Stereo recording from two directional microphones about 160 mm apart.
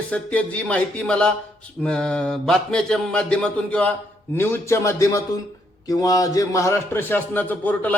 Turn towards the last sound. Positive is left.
turn(degrees=10)  # may be behind; listen again after turning